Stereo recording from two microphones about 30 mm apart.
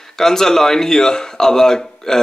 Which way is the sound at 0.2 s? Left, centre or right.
Centre.